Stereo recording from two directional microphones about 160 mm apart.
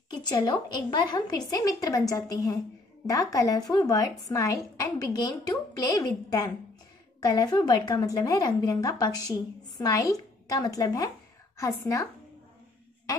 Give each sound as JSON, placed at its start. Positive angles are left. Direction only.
{"t": 0.1, "sound": "a woman's voice", "side_deg": 25}